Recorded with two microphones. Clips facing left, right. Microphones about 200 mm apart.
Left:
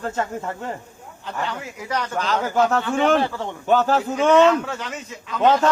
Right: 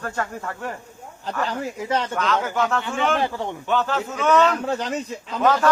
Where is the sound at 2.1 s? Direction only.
35° left (ahead or behind).